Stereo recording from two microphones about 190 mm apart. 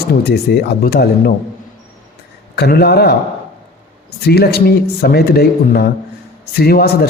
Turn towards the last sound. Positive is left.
turn(degrees=55)  # may be behind; listen again after turning